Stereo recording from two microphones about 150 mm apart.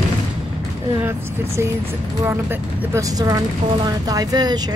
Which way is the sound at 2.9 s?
25° right (ahead or behind).